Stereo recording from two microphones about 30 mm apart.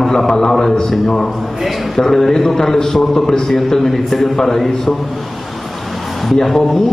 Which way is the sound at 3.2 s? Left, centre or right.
Left.